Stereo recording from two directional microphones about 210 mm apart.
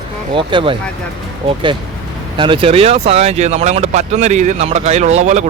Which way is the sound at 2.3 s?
25° right (ahead or behind).